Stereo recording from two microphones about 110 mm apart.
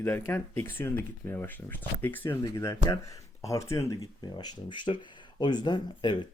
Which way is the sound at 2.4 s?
30° left (ahead or behind).